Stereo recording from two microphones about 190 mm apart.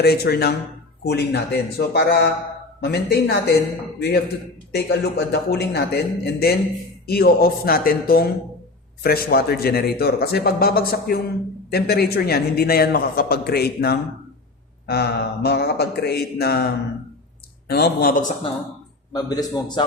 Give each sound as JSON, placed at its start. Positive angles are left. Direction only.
{"t": 0.0, "sound": "a man's voice", "side_deg": 55}
{"t": 4.7, "sound": "a man's voice", "side_deg": 55}
{"t": 17.7, "sound": "a man's voice", "side_deg": 55}
{"t": 19.1, "sound": "a man's voice", "side_deg": 20}